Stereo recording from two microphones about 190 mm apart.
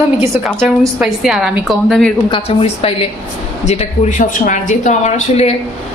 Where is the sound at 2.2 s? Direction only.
25° left (ahead or behind).